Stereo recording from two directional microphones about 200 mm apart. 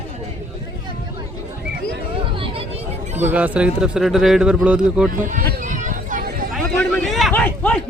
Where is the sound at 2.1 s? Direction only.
25° right (ahead or behind).